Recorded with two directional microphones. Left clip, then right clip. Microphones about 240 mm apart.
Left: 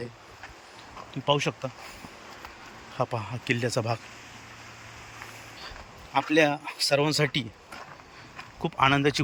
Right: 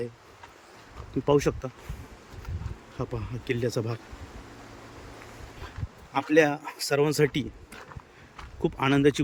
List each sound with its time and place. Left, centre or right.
1.2 s speech: centre
3.0 s speech: centre
6.1 s speech: centre
8.6 s speech: centre